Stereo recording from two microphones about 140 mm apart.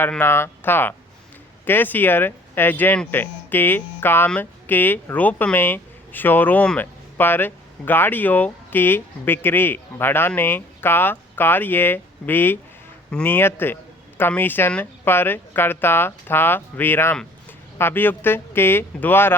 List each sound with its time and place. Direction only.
0.0 s speech: 15° left (ahead or behind)